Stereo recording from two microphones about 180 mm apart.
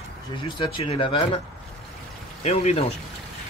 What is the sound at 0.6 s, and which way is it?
Speech, 30° left (ahead or behind).